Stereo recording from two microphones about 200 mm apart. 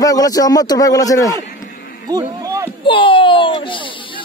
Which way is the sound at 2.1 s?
15° right (ahead or behind).